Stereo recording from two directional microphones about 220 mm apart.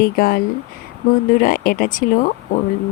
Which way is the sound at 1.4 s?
40° left (ahead or behind).